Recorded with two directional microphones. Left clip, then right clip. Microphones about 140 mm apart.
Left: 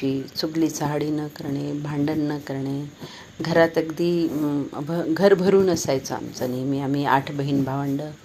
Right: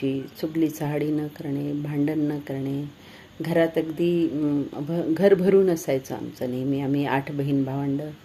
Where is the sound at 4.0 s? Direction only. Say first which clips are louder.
Right 1 dB; 50° left (ahead or behind).